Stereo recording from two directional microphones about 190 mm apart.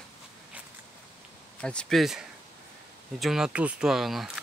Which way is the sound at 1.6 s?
5° left (ahead or behind).